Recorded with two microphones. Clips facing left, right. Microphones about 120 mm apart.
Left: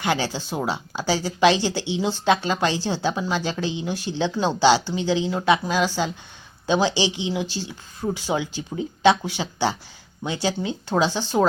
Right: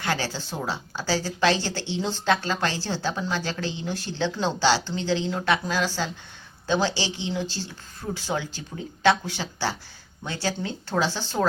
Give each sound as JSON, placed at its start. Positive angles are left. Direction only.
{"t": 0.0, "sound": "speech", "side_deg": 15}